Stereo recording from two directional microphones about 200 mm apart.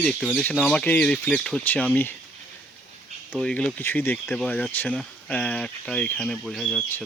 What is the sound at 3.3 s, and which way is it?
Speech, 5° left (ahead or behind).